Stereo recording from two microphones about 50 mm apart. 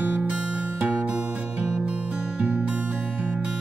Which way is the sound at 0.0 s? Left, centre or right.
Right.